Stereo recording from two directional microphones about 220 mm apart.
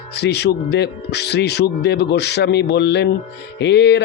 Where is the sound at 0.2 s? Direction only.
50° left (ahead or behind).